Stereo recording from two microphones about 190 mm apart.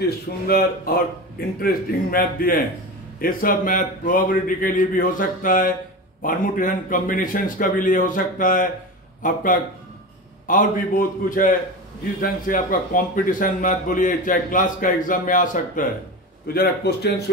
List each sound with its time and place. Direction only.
0.0 s a man's voice: 50° left (ahead or behind)
16.5 s a man's voice: 60° left (ahead or behind)